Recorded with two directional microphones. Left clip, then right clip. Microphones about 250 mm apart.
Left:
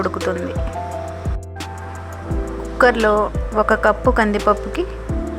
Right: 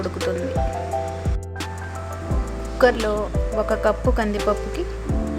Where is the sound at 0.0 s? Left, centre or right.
Centre.